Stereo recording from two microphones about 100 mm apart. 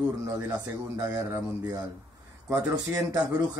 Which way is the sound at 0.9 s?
40° right (ahead or behind).